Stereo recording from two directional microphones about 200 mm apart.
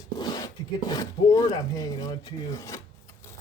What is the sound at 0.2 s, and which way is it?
Speech, 20° left (ahead or behind).